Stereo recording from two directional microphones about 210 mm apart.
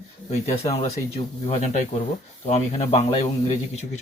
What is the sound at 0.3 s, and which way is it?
Speech, 30° left (ahead or behind).